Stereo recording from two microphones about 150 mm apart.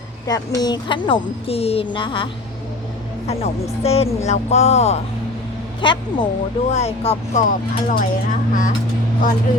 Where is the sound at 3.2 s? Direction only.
45° left (ahead or behind).